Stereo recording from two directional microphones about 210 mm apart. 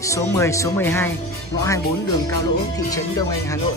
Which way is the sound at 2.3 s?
15° left (ahead or behind).